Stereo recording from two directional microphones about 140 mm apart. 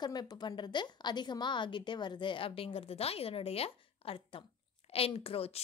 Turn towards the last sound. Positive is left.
turn(degrees=45)  # may be behind; listen again after turning